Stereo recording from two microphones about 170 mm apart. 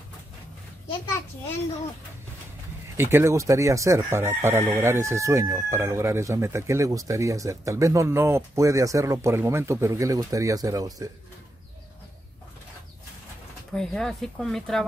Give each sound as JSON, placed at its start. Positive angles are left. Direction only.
{"t": 3.0, "sound": "speech", "side_deg": -15}
{"t": 13.7, "sound": "speech", "side_deg": 5}